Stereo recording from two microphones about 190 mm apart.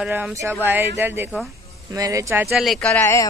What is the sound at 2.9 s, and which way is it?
Speech, 15° left (ahead or behind).